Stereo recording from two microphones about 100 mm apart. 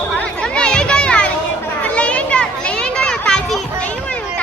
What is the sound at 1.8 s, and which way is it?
Children playing, 10° left (ahead or behind).